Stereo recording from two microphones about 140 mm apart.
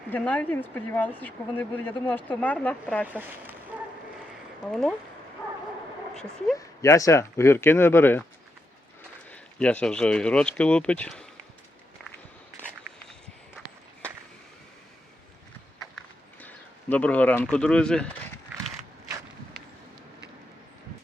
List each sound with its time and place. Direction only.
0.1 s speech: 10° left (ahead or behind)
3.1 s speech: 15° right (ahead or behind)
4.6 s speech: 5° left (ahead or behind)
6.1 s speech: 5° left (ahead or behind)
6.6 s speech: 25° left (ahead or behind)
9.3 s speech: 10° left (ahead or behind)
16.4 s speech: 10° left (ahead or behind)